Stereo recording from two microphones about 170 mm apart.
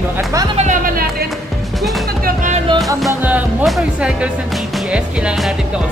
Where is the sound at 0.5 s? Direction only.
50° right (ahead or behind).